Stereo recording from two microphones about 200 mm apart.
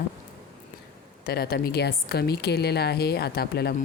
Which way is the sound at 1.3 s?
50° left (ahead or behind).